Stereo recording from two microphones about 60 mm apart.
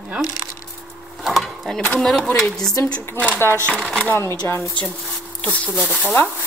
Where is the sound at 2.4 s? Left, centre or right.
Centre.